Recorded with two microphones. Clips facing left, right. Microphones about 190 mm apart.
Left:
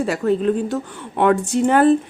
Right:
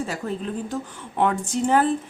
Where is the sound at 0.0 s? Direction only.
70° left (ahead or behind).